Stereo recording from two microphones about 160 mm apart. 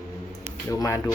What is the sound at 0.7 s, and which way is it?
Speech, 20° left (ahead or behind).